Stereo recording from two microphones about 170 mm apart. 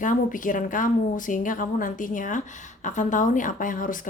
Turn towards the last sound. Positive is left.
turn(degrees=50)  # may be behind; listen again after turning